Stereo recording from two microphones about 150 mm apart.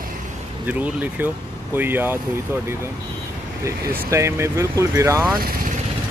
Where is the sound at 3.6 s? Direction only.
20° right (ahead or behind).